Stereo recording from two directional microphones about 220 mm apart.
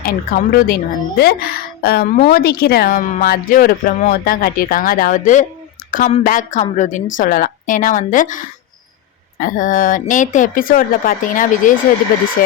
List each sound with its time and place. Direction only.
0.0 s a woman's voice: 40° left (ahead or behind)